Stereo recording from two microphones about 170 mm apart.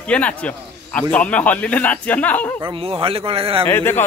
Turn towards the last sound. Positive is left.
turn(degrees=15)  # may be behind; listen again after turning